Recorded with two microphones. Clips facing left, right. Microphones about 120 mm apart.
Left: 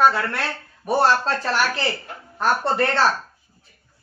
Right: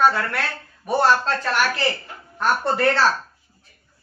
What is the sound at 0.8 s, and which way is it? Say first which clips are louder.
Speech: even; 35° left (ahead or behind).